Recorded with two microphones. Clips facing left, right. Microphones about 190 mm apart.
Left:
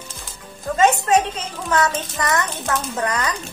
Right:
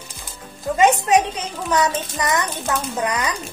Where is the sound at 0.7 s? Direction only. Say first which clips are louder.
Right 1 dB; 15° right (ahead or behind).